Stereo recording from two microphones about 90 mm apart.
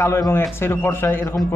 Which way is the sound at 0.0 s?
30° left (ahead or behind).